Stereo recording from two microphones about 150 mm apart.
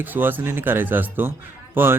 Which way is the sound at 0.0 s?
15° right (ahead or behind).